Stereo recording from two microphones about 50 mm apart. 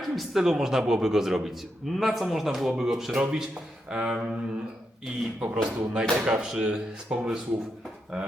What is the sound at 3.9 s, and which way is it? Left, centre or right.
Speech, centre.